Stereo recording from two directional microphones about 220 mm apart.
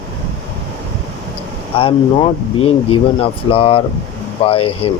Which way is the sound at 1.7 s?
25° left (ahead or behind).